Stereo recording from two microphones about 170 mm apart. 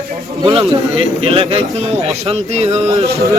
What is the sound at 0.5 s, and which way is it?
A man's voice, 35° right (ahead or behind).